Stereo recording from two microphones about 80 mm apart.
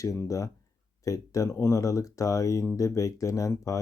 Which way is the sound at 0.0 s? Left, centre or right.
Left.